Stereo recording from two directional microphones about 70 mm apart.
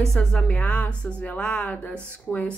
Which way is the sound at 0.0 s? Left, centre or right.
Centre.